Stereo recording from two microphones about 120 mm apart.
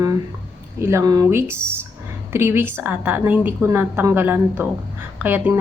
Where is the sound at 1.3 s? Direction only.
20° right (ahead or behind).